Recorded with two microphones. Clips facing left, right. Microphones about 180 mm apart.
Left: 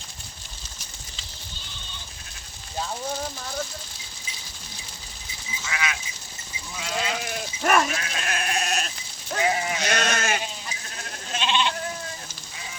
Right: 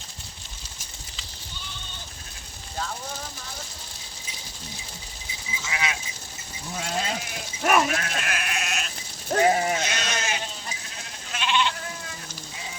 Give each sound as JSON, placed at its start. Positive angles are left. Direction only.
{"t": 5.6, "sound": "speech", "side_deg": -25}
{"t": 6.7, "sound": "sheep", "side_deg": -45}
{"t": 7.6, "sound": "speech", "side_deg": -5}
{"t": 7.9, "sound": "speech", "side_deg": -50}
{"t": 8.2, "sound": "sheep", "side_deg": 30}
{"t": 9.3, "sound": "sheep", "side_deg": -45}
{"t": 9.8, "sound": "sheep", "side_deg": 60}
{"t": 11.3, "sound": "goat", "side_deg": 25}